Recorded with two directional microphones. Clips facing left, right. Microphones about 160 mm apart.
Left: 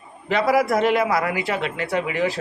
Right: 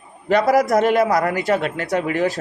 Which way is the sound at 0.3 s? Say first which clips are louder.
Right 3 dB; 45° right (ahead or behind).